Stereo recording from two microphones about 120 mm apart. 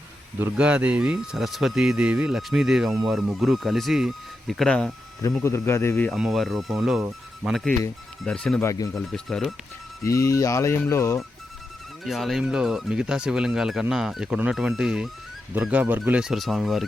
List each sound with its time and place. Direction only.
0.5 s speech: 10° right (ahead or behind)
5.4 s speech: 20° left (ahead or behind)
6.1 s speech: centre (ahead or behind)
8.6 s speech: 30° left (ahead or behind)
9.0 s speech: 5° left (ahead or behind)
10.0 s speech: 25° left (ahead or behind)
12.0 s speech: centre (ahead or behind)